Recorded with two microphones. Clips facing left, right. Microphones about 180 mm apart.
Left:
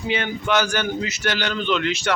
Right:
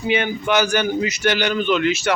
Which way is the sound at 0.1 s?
10° right (ahead or behind).